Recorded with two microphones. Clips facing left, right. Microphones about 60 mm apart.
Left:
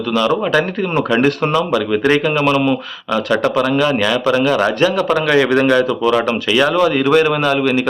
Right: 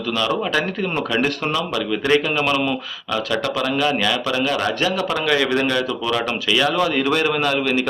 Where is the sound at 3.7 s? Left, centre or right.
Centre.